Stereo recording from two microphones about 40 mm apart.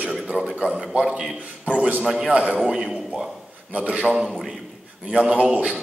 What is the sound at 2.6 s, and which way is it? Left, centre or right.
Speech, centre.